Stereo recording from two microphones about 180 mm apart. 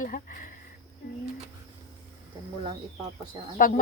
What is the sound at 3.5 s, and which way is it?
Speech, 50° left (ahead or behind).